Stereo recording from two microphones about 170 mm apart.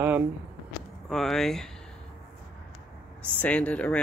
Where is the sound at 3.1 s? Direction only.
10° left (ahead or behind).